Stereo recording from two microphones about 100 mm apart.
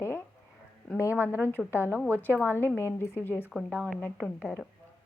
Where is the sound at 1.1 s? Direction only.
15° right (ahead or behind).